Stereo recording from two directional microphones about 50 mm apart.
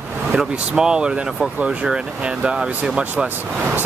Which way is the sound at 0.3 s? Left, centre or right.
Centre.